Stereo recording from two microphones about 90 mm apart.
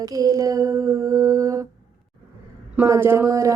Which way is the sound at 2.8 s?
30° right (ahead or behind).